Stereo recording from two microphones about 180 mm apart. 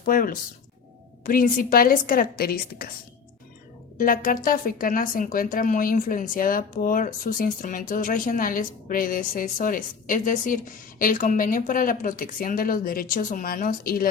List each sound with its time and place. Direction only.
0.0 s speech: 50° left (ahead or behind)
3.9 s speech: 50° left (ahead or behind)